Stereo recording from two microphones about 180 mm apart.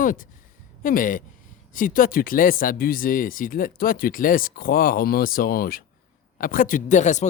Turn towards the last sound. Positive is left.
turn(degrees=40)  # may be behind; listen again after turning